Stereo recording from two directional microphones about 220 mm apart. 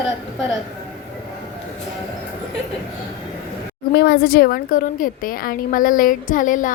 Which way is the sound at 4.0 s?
45° left (ahead or behind).